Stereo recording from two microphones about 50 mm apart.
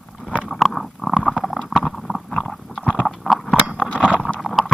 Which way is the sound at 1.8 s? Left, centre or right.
Centre.